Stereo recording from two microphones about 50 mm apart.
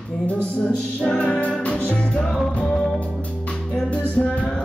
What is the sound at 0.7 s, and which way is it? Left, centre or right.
Music, left.